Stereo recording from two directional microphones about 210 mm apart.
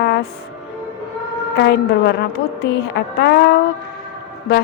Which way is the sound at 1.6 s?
55° left (ahead or behind).